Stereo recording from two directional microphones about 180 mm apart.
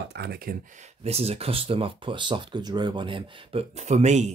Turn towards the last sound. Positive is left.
turn(degrees=-40)  # may be behind; listen again after turning